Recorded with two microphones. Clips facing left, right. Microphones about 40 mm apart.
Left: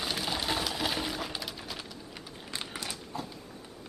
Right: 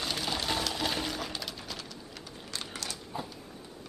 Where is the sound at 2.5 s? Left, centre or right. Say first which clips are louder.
Left 1 dB; centre.